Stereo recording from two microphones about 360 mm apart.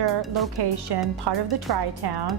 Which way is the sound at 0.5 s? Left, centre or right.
Right.